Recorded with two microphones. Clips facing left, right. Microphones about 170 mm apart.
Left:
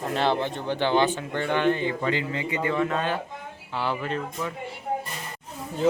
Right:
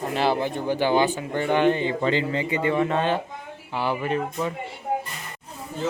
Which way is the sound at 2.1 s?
30° right (ahead or behind).